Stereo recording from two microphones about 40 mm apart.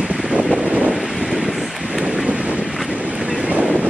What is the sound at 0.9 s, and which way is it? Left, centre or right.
Wind, centre.